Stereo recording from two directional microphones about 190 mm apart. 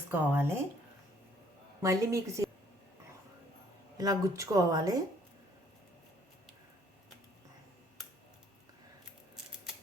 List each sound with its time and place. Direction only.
0.1 s a woman's voice: 10° right (ahead or behind)
1.8 s a woman's voice: 15° right (ahead or behind)
3.9 s a woman's voice: 20° right (ahead or behind)